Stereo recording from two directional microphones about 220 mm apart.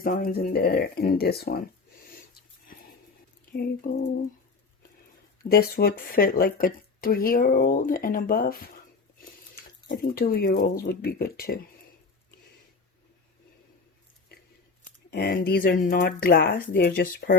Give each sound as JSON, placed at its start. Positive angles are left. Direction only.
{"t": 0.0, "sound": "speech", "side_deg": 40}
{"t": 2.0, "sound": "a sound", "side_deg": 40}
{"t": 3.5, "sound": "speech", "side_deg": 45}
{"t": 5.4, "sound": "speech", "side_deg": 45}
{"t": 15.1, "sound": "speech", "side_deg": 45}